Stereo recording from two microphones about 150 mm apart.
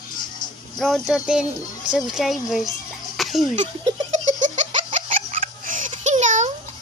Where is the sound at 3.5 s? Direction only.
50° right (ahead or behind).